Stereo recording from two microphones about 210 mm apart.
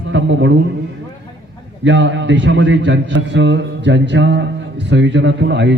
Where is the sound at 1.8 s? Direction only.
60° right (ahead or behind).